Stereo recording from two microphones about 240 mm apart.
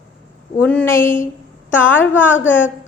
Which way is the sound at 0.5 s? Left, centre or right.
Centre.